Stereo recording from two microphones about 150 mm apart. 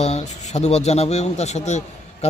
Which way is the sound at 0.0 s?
45° left (ahead or behind).